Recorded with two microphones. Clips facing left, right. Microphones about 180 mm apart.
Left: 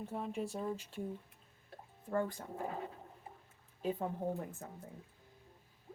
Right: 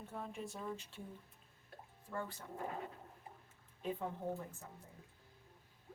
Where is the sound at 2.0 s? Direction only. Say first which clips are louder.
Left 9 dB; 50° left (ahead or behind).